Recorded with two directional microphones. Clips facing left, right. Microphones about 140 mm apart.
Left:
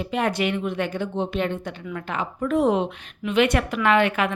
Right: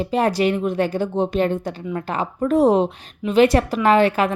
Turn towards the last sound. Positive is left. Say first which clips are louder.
# right 4 dB
turn(degrees=-35)  # may be behind; listen again after turning